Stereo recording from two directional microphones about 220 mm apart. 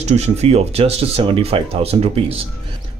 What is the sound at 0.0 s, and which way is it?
Speech, 30° right (ahead or behind).